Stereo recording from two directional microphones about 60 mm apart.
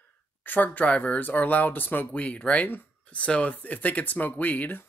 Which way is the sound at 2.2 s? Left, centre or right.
Left.